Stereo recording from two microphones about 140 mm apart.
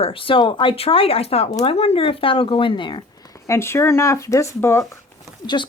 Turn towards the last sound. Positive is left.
turn(degrees=35)  # may be behind; listen again after turning